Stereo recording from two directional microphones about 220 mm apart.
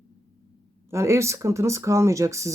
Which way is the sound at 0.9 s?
15° right (ahead or behind).